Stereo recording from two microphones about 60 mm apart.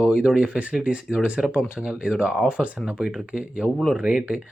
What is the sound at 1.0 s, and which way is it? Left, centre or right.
Speech, centre.